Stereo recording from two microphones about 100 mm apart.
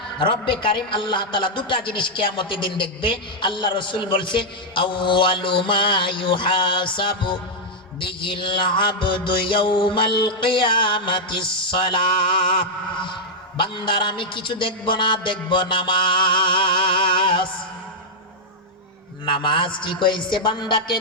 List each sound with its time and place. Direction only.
0.2 s a man's voice: 55° left (ahead or behind)
13.6 s a man's voice: 55° left (ahead or behind)
19.2 s a man's voice: 55° left (ahead or behind)